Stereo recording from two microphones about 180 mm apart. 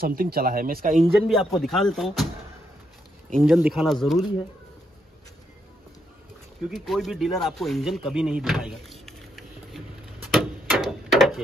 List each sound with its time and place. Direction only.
0.0 s speech: 55° right (ahead or behind)
1.0 s speech: centre (ahead or behind)
3.3 s speech: centre (ahead or behind)
6.7 s speech: centre (ahead or behind)
10.3 s a sound: centre (ahead or behind)